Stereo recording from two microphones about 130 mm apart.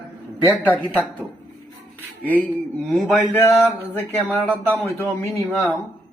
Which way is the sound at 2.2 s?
10° left (ahead or behind).